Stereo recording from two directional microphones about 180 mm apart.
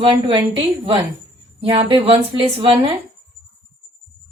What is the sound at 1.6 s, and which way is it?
A woman's voice, 30° right (ahead or behind).